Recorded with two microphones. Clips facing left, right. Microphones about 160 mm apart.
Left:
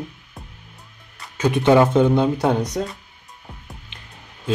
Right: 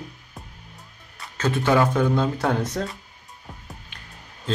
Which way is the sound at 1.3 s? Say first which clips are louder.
Left 5 dB; 15° left (ahead or behind).